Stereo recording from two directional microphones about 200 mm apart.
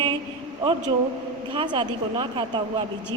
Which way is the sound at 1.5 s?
25° right (ahead or behind).